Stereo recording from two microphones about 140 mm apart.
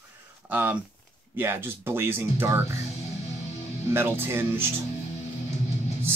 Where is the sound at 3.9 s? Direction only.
15° right (ahead or behind).